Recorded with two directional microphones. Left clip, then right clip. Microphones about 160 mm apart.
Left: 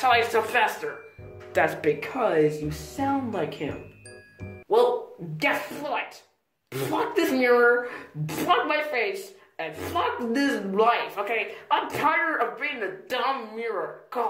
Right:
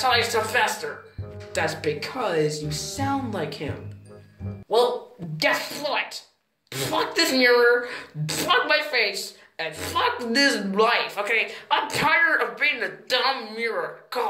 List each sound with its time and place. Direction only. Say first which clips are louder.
0.0 s a woman's voice: even; 15° left (ahead or behind)
1.5 s speech: left 2 dB; 30° left (ahead or behind)
2.0 s a woman's voice: left 1 dB; 15° left (ahead or behind)
2.8 s speech: even; centre (ahead or behind)
5.4 s a woman's voice: right 3 dB; 10° left (ahead or behind)